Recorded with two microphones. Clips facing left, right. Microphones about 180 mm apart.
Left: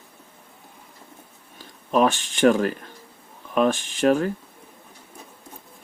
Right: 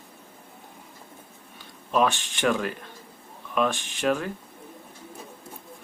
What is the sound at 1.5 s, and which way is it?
Speech, 45° left (ahead or behind).